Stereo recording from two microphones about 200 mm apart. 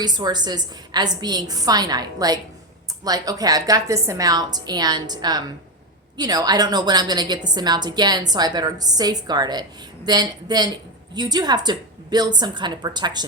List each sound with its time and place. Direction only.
0.0 s a woman's voice: 20° right (ahead or behind)